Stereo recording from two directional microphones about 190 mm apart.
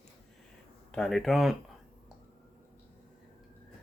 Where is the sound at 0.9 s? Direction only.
Centre (ahead or behind).